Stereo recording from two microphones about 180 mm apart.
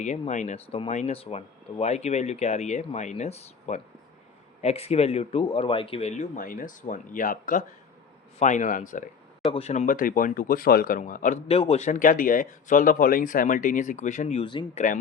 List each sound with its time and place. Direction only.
0.0 s speech: 40° left (ahead or behind)
11.4 s speech: 30° left (ahead or behind)